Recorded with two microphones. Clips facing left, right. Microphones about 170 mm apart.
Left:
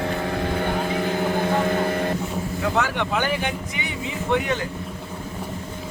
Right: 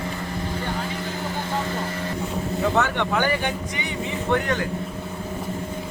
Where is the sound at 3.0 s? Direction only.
15° left (ahead or behind).